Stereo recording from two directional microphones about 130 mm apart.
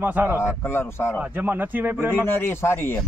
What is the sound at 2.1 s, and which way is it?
Speech, 15° left (ahead or behind).